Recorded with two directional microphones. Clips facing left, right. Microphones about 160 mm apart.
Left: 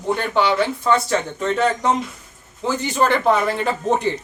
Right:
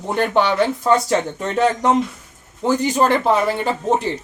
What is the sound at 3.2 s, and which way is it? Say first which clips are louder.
Speech: right 1 dB; 5° right (ahead or behind).